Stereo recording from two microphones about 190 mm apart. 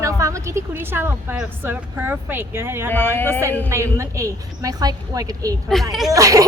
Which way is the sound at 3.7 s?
15° right (ahead or behind).